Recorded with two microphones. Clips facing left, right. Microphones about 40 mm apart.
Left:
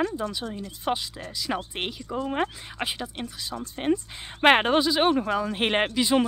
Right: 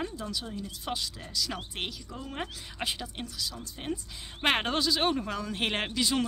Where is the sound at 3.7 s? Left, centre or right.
Left.